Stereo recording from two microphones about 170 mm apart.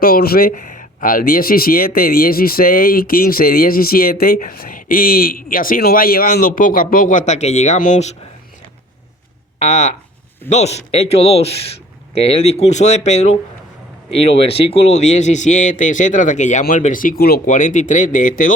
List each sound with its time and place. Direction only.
0.0 s speech: 60° left (ahead or behind); by 8.1 s 45° left (ahead or behind)
9.6 s speech: 40° left (ahead or behind)